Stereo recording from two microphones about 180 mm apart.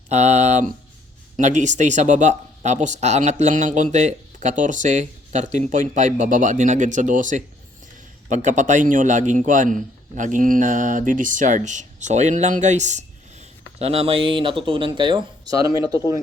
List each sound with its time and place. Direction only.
0.1 s a man's voice: 40° right (ahead or behind); by 16.0 s 20° right (ahead or behind)